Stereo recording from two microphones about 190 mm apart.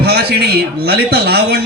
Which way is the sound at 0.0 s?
55° right (ahead or behind).